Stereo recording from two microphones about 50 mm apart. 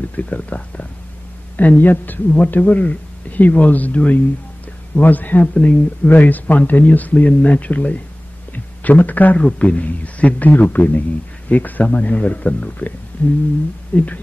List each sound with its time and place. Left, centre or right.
0.1 s a man's voice: left
9.4 s a man's voice: left
13.1 s a sound: left
13.9 s a man's voice: left